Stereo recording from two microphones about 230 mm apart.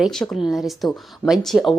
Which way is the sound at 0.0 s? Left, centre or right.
Centre.